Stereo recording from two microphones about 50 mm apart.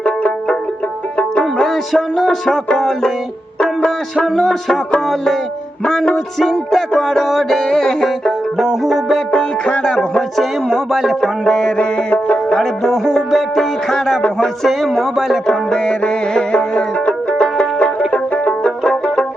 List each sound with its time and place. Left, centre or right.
0.0 s music: left
1.6 s music: centre
5.8 s music: centre
8.6 s music: centre
9.3 s music: left
10.7 s music: centre
11.2 s music: centre
12.1 s music: left
12.5 s music: centre
15.4 s music: centre